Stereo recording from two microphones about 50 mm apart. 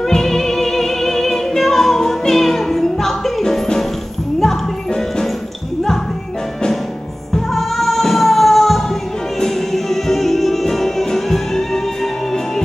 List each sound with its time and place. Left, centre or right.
0.0 s music: centre
7.3 s music: centre